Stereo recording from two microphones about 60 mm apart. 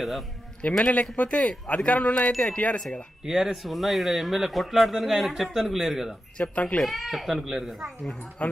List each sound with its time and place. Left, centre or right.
0.6 s speech: left
2.1 s chime: centre
3.3 s a man's voice: centre
6.3 s speech: centre
6.8 s a man's voice: centre
8.4 s speech: left